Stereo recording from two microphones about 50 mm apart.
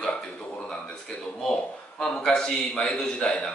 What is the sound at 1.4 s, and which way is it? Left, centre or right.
Speech, centre.